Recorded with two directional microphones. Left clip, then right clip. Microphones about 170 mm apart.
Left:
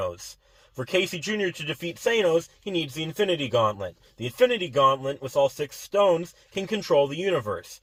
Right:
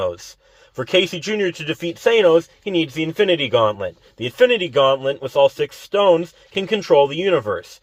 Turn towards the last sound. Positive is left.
turn(degrees=-25)  # may be behind; listen again after turning